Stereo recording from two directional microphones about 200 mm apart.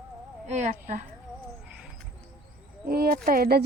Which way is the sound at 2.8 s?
50° right (ahead or behind).